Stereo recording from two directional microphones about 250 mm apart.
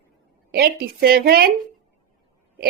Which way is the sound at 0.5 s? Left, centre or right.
Right.